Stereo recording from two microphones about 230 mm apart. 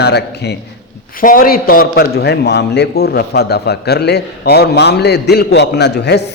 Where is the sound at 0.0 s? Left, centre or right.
Left.